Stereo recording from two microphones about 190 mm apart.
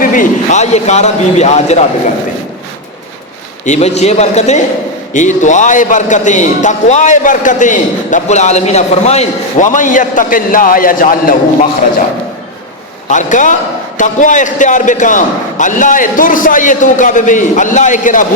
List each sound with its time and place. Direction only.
0.0 s a man's voice: 45° left (ahead or behind)
3.7 s a man's voice: 35° left (ahead or behind)
13.1 s a man's voice: 40° left (ahead or behind)